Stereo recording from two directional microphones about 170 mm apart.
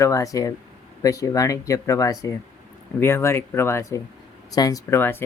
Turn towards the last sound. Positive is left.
turn(degrees=15)  # may be behind; listen again after turning